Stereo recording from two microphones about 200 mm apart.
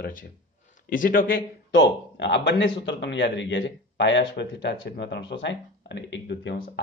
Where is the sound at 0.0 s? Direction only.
45° left (ahead or behind).